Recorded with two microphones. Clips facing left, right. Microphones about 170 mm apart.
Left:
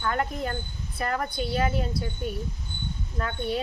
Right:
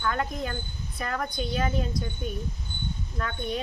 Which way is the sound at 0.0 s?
15° left (ahead or behind).